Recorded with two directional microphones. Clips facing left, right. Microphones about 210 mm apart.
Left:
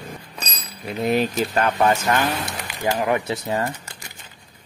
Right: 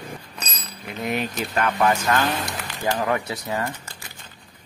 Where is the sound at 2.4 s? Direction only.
10° left (ahead or behind); by 3.7 s 25° left (ahead or behind).